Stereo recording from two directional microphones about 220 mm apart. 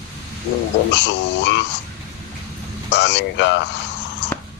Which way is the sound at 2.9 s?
55° left (ahead or behind).